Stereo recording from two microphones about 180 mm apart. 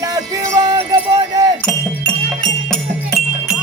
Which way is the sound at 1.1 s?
20° right (ahead or behind).